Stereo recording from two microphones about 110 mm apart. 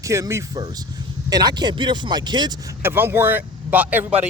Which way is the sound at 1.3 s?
40° right (ahead or behind).